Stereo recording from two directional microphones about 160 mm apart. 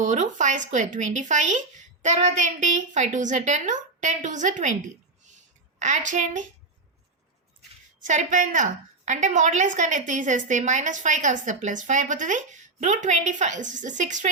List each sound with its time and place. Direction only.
0.0 s a woman's voice: 50° right (ahead or behind)
5.8 s a woman's voice: 50° right (ahead or behind)
8.0 s a woman's voice: 50° right (ahead or behind)